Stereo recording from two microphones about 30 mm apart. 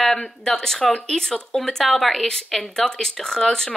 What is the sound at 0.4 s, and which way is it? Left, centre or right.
Speech, centre.